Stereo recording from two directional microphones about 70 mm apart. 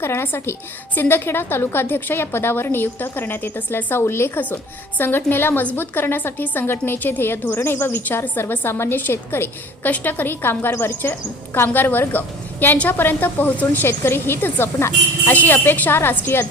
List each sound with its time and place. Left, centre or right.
0.0 s a woman's voice: left